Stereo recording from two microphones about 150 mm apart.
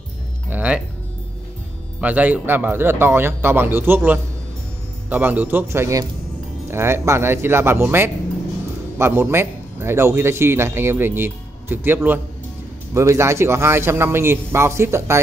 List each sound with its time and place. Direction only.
0.5 s music: 10° right (ahead or behind)
2.0 s a man's voice: 10° right (ahead or behind)